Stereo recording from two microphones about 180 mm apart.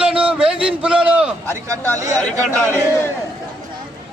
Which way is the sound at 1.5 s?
15° right (ahead or behind).